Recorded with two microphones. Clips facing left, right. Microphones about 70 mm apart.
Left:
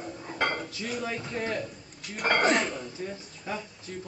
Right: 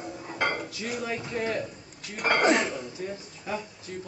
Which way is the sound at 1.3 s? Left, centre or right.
Right.